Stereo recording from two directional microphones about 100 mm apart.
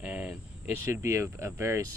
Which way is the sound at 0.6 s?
25° right (ahead or behind).